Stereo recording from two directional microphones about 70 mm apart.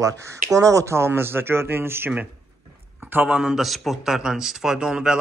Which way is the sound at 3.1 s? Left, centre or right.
Right.